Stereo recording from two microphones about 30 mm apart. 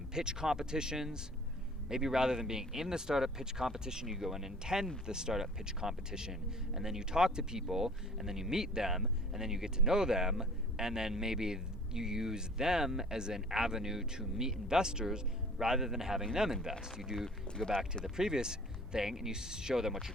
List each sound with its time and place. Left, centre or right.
0.1 s speech: right
17.2 s speech: centre
18.0 s speech: right